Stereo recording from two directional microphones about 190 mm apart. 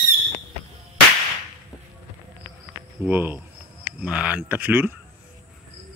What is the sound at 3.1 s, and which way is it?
A man's voice, 10° right (ahead or behind).